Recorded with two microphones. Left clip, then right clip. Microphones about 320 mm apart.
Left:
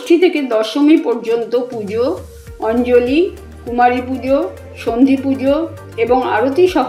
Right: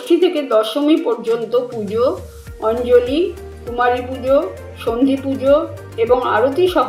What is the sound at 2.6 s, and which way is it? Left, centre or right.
Speech, left.